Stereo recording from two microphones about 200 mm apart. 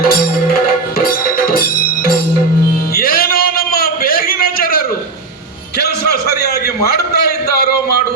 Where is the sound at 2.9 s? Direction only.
50° left (ahead or behind).